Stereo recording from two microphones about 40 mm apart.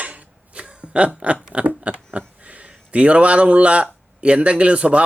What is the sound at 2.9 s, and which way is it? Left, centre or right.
Speech, right.